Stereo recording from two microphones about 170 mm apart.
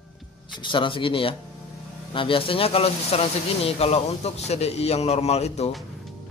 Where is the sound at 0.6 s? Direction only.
30° left (ahead or behind).